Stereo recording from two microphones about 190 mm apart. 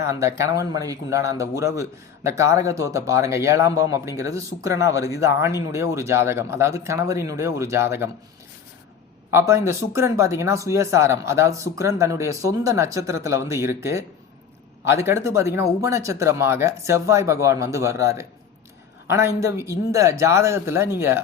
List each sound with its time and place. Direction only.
0.0 s speech: 15° right (ahead or behind)
9.3 s speech: 15° right (ahead or behind)